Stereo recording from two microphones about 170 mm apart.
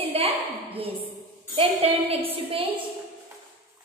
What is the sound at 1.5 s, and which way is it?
A woman's voice, 35° right (ahead or behind).